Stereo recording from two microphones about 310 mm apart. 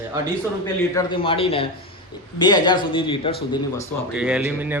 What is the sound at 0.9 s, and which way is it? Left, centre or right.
A man's voice, centre.